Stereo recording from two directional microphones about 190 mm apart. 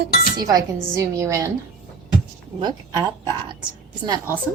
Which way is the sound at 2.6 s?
20° right (ahead or behind).